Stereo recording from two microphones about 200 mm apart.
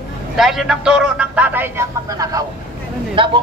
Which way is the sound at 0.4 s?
Centre (ahead or behind).